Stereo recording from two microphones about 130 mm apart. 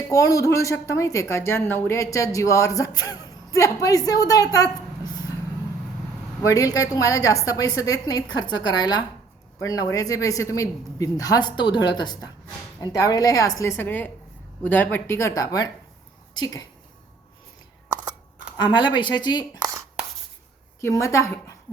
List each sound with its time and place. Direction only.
0.1 s a woman's voice: 25° left (ahead or behind)
6.4 s a woman's voice: 25° left (ahead or behind)
18.6 s speech: 35° left (ahead or behind)
20.8 s a woman's voice: 25° left (ahead or behind)